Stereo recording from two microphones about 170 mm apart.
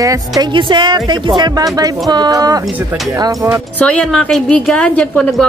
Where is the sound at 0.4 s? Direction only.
30° right (ahead or behind).